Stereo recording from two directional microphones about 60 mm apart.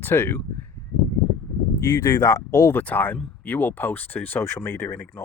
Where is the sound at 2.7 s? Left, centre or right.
Left.